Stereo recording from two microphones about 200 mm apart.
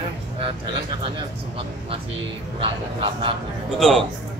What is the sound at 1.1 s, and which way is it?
Speech, 25° right (ahead or behind).